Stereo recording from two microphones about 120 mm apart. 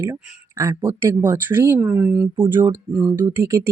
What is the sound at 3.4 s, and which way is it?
Speech, 25° right (ahead or behind).